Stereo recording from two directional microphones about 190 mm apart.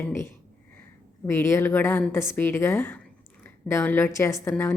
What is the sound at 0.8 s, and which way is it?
A woman's voice, 15° left (ahead or behind).